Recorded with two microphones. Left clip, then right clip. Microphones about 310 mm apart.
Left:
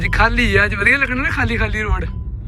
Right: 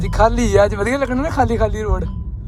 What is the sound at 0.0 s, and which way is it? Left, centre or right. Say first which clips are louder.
Speech: even; centre.